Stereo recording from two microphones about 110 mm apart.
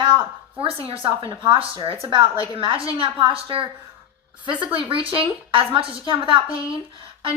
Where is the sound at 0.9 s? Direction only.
60° right (ahead or behind).